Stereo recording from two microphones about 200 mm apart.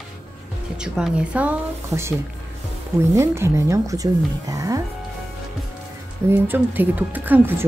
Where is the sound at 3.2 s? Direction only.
15° right (ahead or behind).